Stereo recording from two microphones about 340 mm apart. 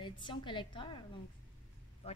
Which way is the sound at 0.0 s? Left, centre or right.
Centre.